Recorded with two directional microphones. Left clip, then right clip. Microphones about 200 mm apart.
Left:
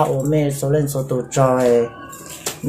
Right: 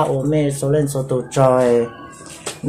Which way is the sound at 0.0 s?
25° right (ahead or behind).